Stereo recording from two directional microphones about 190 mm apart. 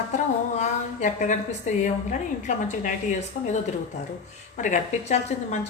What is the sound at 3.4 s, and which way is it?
Speech, 50° left (ahead or behind).